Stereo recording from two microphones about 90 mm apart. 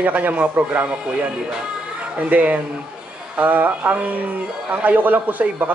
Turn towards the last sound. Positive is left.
turn(degrees=-20)  # may be behind; listen again after turning